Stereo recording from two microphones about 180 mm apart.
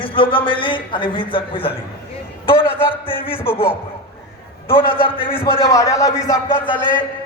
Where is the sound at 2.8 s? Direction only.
30° left (ahead or behind).